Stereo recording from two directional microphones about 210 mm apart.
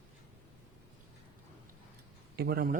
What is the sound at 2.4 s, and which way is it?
Speech, 50° right (ahead or behind).